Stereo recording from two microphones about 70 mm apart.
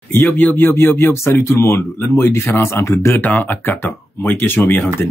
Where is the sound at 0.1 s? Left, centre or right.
Left.